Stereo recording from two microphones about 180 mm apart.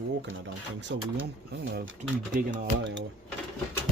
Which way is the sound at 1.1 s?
65° right (ahead or behind).